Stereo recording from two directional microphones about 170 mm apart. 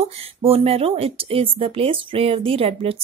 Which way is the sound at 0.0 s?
35° right (ahead or behind).